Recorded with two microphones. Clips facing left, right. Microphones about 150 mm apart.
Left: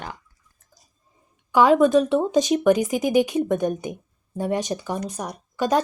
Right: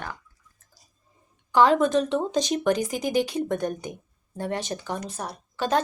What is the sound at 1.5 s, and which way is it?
Speech, 10° left (ahead or behind).